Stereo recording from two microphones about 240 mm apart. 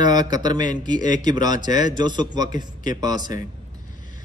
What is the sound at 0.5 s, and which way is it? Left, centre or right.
Speech, left.